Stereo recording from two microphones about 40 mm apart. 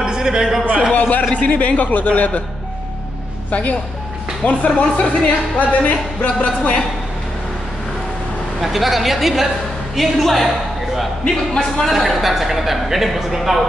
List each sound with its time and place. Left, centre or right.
0.0 s a sound: centre
0.9 s a man's voice: left
3.4 s speech: left
8.5 s a man's voice: centre
11.2 s speech: centre
11.9 s a man's voice: centre